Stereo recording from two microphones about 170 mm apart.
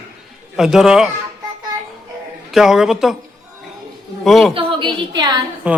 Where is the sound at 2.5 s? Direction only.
Centre (ahead or behind).